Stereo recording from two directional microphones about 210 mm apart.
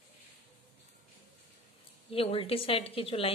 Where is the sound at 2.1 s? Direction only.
25° left (ahead or behind).